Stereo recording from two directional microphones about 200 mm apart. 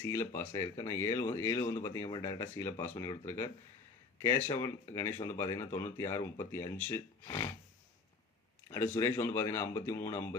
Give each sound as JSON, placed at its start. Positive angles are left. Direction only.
{"t": 0.0, "sound": "speech", "side_deg": 15}
{"t": 8.7, "sound": "speech", "side_deg": 10}